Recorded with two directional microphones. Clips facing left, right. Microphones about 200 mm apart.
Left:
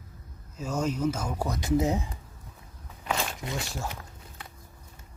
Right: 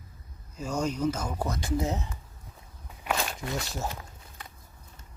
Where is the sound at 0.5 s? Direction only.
5° left (ahead or behind).